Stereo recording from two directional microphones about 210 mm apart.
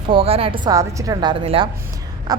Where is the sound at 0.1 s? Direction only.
25° right (ahead or behind).